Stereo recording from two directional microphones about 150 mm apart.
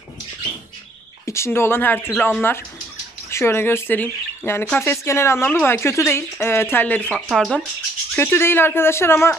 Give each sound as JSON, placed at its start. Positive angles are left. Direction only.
{"t": 1.2, "sound": "speech", "side_deg": 20}
{"t": 7.1, "sound": "speech", "side_deg": 0}
{"t": 8.2, "sound": "speech", "side_deg": 15}